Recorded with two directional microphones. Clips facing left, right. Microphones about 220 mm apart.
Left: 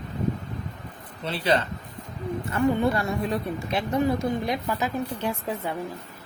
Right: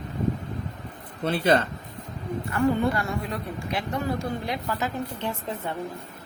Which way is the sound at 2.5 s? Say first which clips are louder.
Even; 25° left (ahead or behind).